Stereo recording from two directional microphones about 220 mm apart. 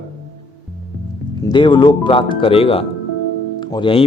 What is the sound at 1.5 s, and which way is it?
Speech, 20° left (ahead or behind).